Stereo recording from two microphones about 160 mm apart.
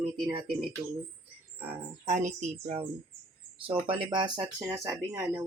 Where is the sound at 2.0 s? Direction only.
50° right (ahead or behind); by 4.7 s 25° right (ahead or behind).